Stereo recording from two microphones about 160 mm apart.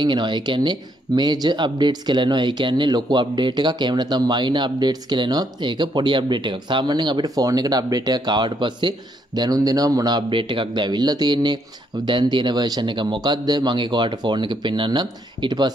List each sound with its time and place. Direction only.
0.0 s speech: 30° right (ahead or behind)